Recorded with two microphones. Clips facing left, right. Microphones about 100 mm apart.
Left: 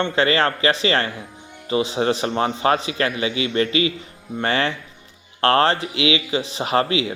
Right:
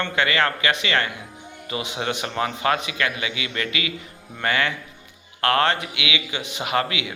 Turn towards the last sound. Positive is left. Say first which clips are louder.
# left 4 dB
turn(degrees=30)  # may be behind; listen again after turning